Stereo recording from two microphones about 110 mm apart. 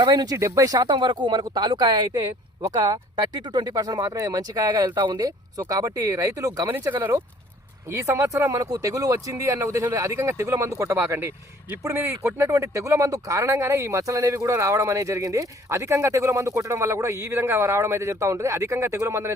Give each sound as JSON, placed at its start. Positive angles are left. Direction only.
{"t": 0.0, "sound": "speech", "side_deg": -35}
{"t": 6.7, "sound": "speech", "side_deg": -20}